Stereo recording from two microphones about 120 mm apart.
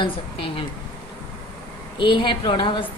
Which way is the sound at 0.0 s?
50° left (ahead or behind).